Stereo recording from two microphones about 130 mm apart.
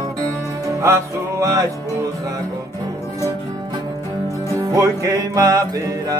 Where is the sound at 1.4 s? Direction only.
25° right (ahead or behind).